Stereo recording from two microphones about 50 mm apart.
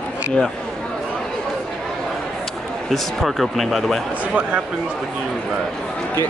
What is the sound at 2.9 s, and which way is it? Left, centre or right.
Speech, centre.